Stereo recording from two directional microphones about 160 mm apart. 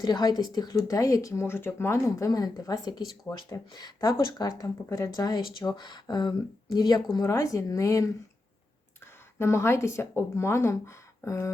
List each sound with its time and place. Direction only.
0.0 s speech: 25° left (ahead or behind)
9.4 s a woman's voice: 15° left (ahead or behind)